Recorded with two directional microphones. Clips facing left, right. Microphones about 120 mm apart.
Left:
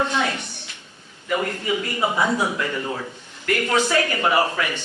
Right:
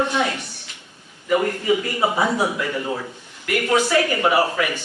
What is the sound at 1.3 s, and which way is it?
Speech, 25° right (ahead or behind).